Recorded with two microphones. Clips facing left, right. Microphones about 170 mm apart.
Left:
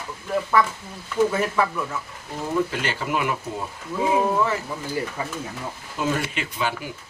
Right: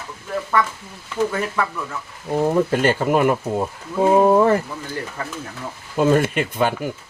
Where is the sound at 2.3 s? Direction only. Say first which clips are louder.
Right 7 dB; 50° right (ahead or behind).